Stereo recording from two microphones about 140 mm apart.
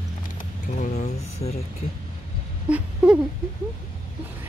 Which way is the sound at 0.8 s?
50° left (ahead or behind).